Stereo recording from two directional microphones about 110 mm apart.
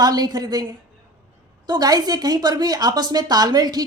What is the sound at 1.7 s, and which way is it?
A woman's voice, 35° right (ahead or behind).